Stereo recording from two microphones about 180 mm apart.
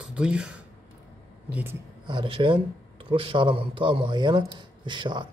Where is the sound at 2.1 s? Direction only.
25° right (ahead or behind).